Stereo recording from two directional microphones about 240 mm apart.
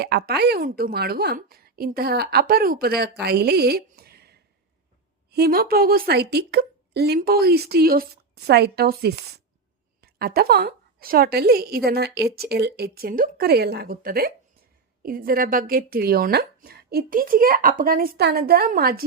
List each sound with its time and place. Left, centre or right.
0.0 s a woman's voice: right